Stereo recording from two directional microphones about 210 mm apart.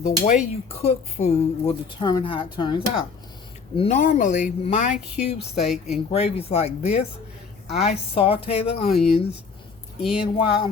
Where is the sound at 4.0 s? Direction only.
35° left (ahead or behind).